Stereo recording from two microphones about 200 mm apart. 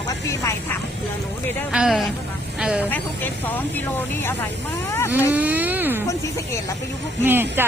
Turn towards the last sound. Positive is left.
turn(degrees=-10)  # may be behind; listen again after turning